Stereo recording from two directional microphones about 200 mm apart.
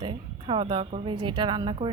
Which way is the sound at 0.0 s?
25° right (ahead or behind).